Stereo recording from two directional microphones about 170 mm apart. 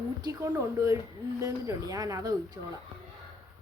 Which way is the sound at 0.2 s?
20° right (ahead or behind).